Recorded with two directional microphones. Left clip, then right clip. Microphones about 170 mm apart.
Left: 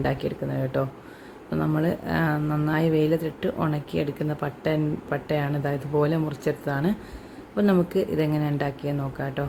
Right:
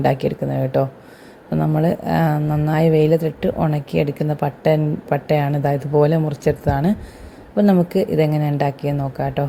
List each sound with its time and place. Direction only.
0.0 s a woman's voice: 30° right (ahead or behind)